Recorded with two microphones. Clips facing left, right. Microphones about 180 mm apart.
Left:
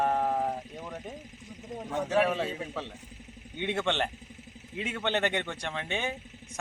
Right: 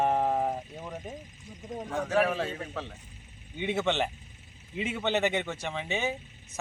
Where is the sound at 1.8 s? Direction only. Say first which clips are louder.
Even; 10° left (ahead or behind).